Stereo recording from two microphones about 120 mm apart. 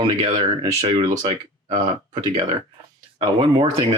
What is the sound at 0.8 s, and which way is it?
Speech, 60° right (ahead or behind).